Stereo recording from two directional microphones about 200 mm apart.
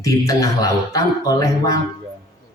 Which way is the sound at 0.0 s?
15° left (ahead or behind).